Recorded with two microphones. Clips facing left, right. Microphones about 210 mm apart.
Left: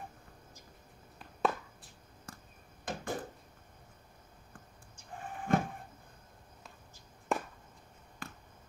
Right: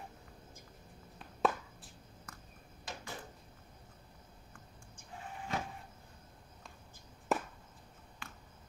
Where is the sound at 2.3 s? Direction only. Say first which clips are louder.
Left 5 dB; 30° left (ahead or behind).